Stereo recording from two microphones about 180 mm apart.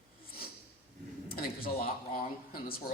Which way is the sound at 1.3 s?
55° left (ahead or behind).